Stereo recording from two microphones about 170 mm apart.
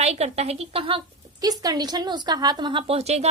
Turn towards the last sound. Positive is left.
turn(degrees=-40)  # may be behind; listen again after turning